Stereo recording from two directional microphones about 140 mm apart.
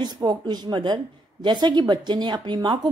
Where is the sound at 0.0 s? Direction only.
30° right (ahead or behind).